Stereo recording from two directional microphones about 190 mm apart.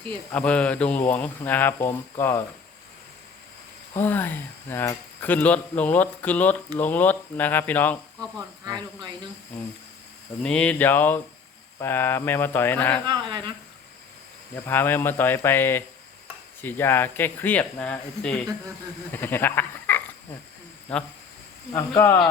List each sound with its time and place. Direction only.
0.1 s speech: 5° left (ahead or behind)
4.0 s speech: 10° left (ahead or behind)
8.2 s speech: 20° right (ahead or behind)
10.4 s speech: 5° left (ahead or behind)
13.1 s speech: 25° right (ahead or behind)
14.5 s speech: 10° left (ahead or behind)
21.7 s speech: 15° left (ahead or behind)